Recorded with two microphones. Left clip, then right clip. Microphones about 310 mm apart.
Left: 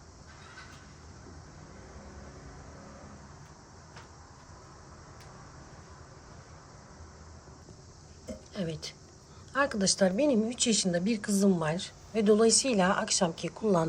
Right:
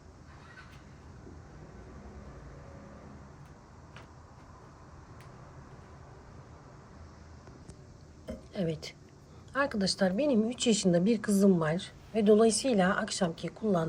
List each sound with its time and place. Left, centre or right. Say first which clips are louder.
8.5 s a woman's voice: right 3 dB; centre